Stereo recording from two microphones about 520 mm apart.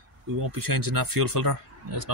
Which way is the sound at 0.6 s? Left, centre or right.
Right.